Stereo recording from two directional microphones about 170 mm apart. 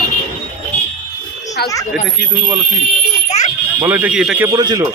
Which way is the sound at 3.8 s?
10° right (ahead or behind).